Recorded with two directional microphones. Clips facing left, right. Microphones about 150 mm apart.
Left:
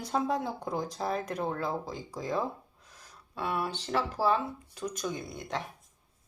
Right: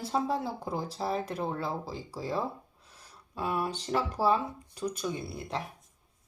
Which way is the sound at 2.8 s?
30° right (ahead or behind).